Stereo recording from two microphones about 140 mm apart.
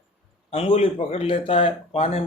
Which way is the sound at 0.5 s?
40° left (ahead or behind).